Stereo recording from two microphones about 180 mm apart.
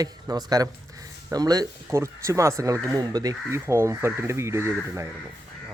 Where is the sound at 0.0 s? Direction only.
20° right (ahead or behind).